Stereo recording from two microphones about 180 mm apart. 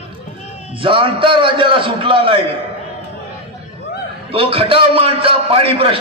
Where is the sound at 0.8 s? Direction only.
30° right (ahead or behind).